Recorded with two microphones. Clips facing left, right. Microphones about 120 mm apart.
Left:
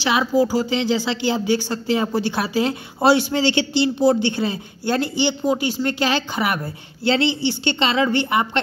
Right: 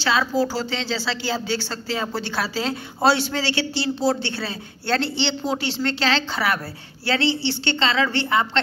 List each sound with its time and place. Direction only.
0.0 s speech: 15° left (ahead or behind)